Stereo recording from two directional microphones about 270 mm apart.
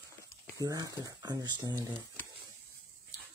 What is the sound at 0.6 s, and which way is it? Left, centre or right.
Speech, centre.